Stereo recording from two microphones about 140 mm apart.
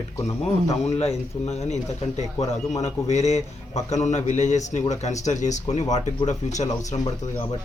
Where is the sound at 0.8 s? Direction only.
50° left (ahead or behind).